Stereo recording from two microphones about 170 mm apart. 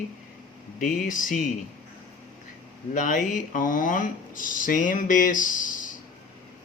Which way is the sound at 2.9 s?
50° left (ahead or behind).